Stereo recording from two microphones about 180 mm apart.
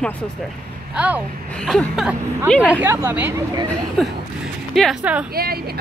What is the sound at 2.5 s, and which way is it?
Speech, 10° left (ahead or behind).